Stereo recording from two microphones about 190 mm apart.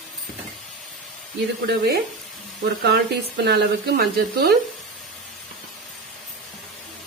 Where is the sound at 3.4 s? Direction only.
60° right (ahead or behind).